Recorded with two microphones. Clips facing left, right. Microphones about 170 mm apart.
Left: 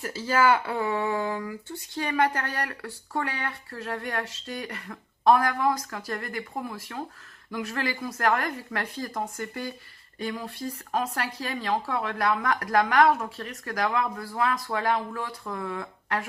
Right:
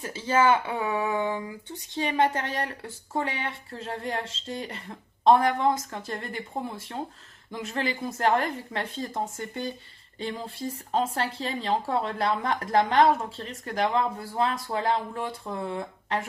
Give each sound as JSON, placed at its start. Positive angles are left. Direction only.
{"t": 0.0, "sound": "speech", "side_deg": -20}